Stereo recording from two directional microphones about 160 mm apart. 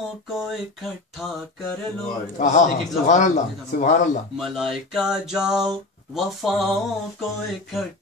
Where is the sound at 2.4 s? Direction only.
50° left (ahead or behind).